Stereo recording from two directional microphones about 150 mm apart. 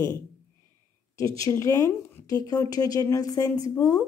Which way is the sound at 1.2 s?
20° left (ahead or behind).